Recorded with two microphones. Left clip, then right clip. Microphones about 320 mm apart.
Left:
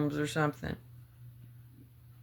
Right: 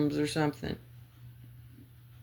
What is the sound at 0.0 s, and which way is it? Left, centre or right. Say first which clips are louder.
Speech: right 2 dB; left.